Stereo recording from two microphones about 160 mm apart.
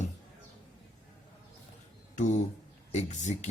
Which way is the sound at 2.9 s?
45° left (ahead or behind).